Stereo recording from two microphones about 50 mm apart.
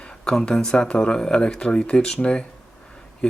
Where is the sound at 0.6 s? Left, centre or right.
Centre.